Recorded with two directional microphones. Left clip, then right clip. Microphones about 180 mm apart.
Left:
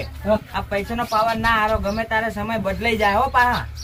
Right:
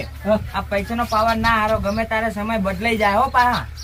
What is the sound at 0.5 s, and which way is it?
Speech, 30° left (ahead or behind).